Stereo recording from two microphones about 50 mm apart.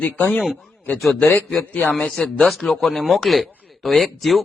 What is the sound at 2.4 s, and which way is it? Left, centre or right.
Speech, centre.